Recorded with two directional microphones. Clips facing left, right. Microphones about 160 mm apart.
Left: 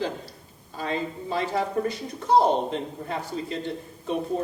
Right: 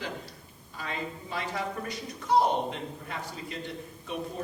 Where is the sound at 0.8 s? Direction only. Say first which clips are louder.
Left 7 dB; 30° left (ahead or behind).